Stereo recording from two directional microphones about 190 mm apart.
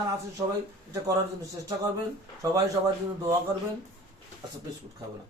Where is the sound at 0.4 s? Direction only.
20° right (ahead or behind).